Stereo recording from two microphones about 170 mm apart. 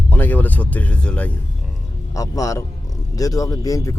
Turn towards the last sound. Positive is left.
turn(degrees=20)  # may be behind; listen again after turning